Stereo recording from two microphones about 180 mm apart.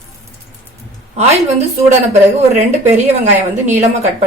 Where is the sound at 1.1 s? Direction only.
40° right (ahead or behind).